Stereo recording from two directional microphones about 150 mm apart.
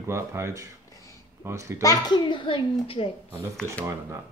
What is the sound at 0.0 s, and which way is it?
Speech, 20° right (ahead or behind).